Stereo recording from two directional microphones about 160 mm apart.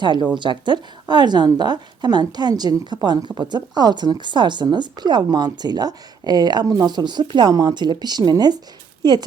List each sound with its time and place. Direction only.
0.0 s a woman's voice: 30° right (ahead or behind)